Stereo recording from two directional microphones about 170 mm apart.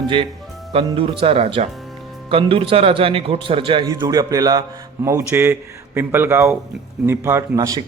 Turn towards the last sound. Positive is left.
turn(degrees=-20)  # may be behind; listen again after turning